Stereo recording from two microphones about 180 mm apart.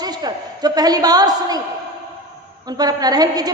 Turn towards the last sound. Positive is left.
turn(degrees=-20)  # may be behind; listen again after turning